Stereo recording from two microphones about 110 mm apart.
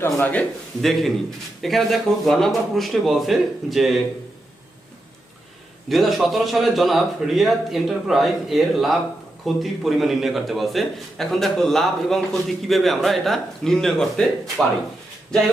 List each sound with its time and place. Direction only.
0.0 s a man's voice: 15° left (ahead or behind)
0.8 s a man's voice: centre (ahead or behind)
5.9 s a man's voice: centre (ahead or behind)